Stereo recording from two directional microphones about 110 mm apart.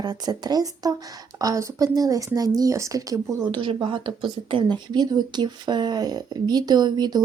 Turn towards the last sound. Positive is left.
turn(degrees=-40)  # may be behind; listen again after turning